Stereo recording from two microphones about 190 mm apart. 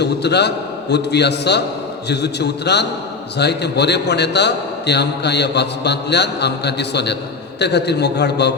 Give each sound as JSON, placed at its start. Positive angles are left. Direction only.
{"t": 0.0, "sound": "a man's voice", "side_deg": 60}